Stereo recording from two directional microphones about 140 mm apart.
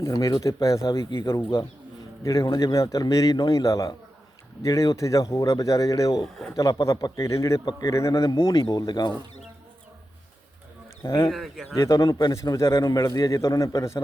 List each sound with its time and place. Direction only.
0.0 s a man's voice: 25° left (ahead or behind)
11.3 s speech: centre (ahead or behind)
11.8 s a man's voice: 25° left (ahead or behind)